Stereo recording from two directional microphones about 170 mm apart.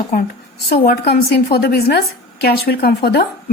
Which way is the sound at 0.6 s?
70° left (ahead or behind).